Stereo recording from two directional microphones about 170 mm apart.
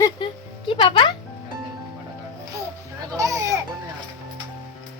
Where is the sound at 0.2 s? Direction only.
30° left (ahead or behind).